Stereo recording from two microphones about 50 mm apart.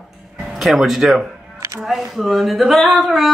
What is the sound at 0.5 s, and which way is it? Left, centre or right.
Speech, centre.